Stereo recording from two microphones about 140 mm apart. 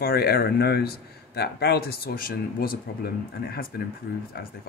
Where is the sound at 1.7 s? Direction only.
90° left.